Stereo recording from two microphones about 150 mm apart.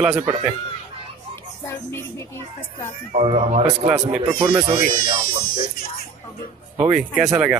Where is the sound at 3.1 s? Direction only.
40° right (ahead or behind).